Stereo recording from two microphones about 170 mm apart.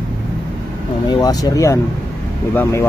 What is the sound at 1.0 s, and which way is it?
Speech, 20° left (ahead or behind).